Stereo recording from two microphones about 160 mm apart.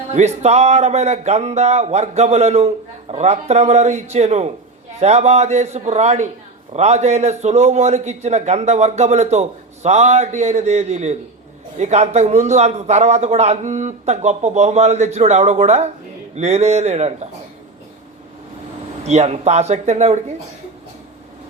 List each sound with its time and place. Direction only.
0.1 s a man's voice: 45° right (ahead or behind)
19.0 s a man's voice: 45° right (ahead or behind)